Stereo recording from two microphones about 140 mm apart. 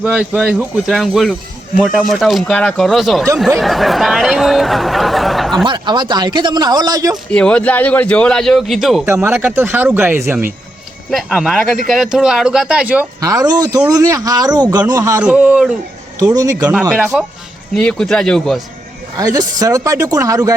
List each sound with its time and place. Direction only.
0.0 s a man's voice: 5° right (ahead or behind)
3.6 s chatter: centre (ahead or behind)
5.6 s speech: 35° right (ahead or behind)
7.3 s a man's voice: 10° left (ahead or behind)
9.0 s speech: 15° right (ahead or behind)
11.1 s a man's voice: centre (ahead or behind)
13.1 s speech: 25° right (ahead or behind)
15.2 s speech: 5° right (ahead or behind)
16.2 s speech: 25° right (ahead or behind)
16.6 s a man's voice: 10° right (ahead or behind)
19.1 s speech: 25° right (ahead or behind)